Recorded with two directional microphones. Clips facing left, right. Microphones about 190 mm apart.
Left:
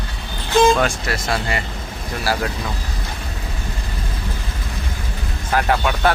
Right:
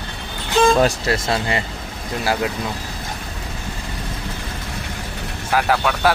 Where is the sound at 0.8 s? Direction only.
30° right (ahead or behind).